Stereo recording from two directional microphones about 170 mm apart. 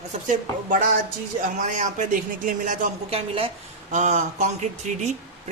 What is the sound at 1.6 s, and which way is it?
A man's voice, 45° right (ahead or behind).